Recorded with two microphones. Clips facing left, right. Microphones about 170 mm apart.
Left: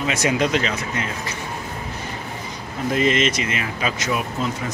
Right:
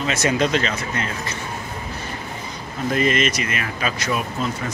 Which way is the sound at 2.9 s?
20° left (ahead or behind).